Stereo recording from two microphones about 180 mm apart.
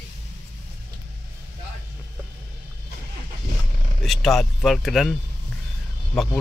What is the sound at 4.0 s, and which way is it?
Speech, centre (ahead or behind).